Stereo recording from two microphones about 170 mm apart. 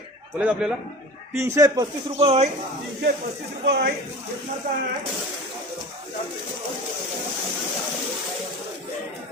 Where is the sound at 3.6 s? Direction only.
75° right (ahead or behind).